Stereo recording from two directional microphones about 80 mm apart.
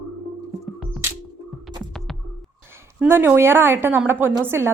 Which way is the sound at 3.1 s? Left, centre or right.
Right.